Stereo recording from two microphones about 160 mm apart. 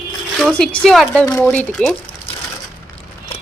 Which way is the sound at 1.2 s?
20° left (ahead or behind).